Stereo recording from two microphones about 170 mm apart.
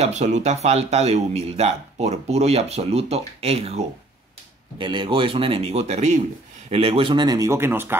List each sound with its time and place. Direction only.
0.0 s speech: 40° right (ahead or behind); by 8.0 s 15° right (ahead or behind)